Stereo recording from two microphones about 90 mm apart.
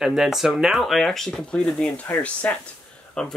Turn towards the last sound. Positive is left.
turn(degrees=10)  # may be behind; listen again after turning